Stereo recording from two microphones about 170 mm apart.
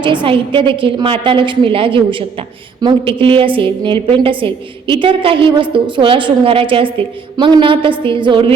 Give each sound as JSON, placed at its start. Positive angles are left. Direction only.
{"t": 0.0, "sound": "a woman's voice", "side_deg": -30}